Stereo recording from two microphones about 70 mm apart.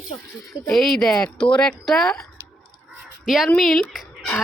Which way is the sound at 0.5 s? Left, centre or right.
Centre.